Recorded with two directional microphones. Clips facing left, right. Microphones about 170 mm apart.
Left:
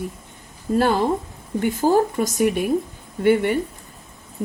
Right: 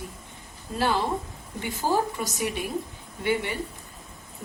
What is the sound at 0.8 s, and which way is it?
Speech, 50° left (ahead or behind).